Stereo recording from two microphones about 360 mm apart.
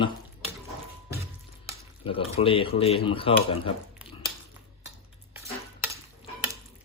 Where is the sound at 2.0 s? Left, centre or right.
Centre.